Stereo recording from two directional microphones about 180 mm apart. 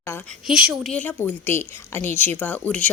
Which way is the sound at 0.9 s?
10° left (ahead or behind).